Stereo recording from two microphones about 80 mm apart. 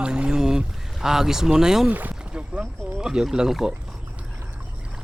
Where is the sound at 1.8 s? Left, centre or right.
Centre.